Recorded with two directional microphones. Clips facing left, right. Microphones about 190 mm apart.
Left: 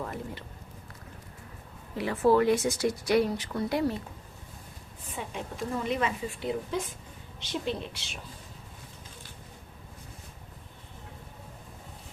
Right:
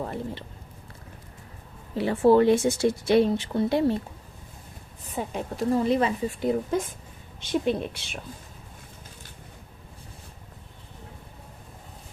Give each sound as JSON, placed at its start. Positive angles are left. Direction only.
{"t": 0.0, "sound": "speech", "side_deg": -30}
{"t": 2.0, "sound": "speech", "side_deg": -30}
{"t": 5.1, "sound": "a woman's voice", "side_deg": -40}